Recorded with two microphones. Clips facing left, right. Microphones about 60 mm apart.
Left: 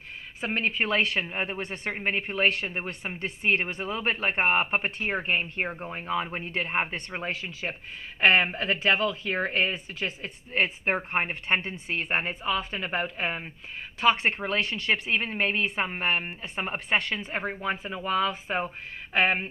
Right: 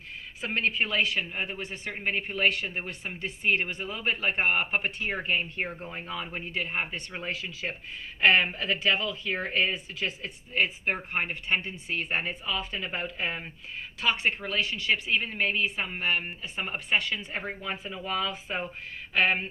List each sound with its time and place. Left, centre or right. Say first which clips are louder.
0.4 s a woman's voice: left 1 dB; left
0.9 s speech: left 2 dB; left
15.1 s a woman's voice: left 1 dB; left